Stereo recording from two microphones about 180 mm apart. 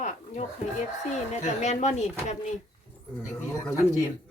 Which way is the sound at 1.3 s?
40° left (ahead or behind).